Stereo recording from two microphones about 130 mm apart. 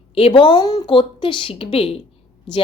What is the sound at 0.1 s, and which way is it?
Speech, 45° left (ahead or behind).